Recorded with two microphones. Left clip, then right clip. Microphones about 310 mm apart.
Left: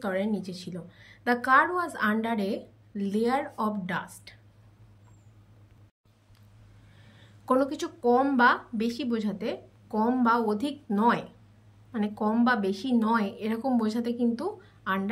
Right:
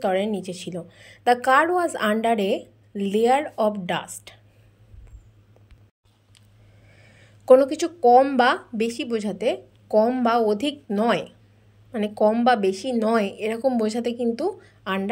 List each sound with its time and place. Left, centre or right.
0.0 s a woman's voice: centre
7.1 s a woman's voice: centre